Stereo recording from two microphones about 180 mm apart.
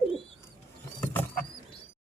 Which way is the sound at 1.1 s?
10° left (ahead or behind).